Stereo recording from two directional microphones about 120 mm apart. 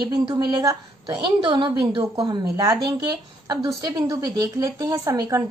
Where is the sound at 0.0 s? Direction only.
35° right (ahead or behind).